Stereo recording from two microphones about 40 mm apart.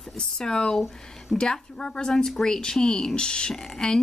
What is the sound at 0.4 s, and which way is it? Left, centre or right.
A woman's voice, centre.